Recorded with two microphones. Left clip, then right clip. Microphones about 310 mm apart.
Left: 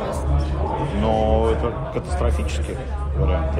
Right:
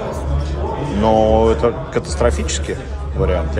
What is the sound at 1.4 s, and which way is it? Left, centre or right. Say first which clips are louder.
Speech: right 7 dB; right.